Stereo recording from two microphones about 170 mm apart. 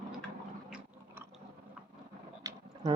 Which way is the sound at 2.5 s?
20° right (ahead or behind).